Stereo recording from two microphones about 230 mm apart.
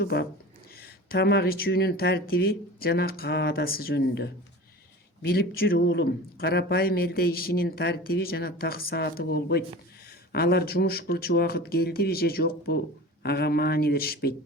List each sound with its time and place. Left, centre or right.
0.0 s speech: left